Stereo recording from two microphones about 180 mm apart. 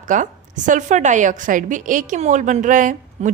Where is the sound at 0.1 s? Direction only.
45° right (ahead or behind).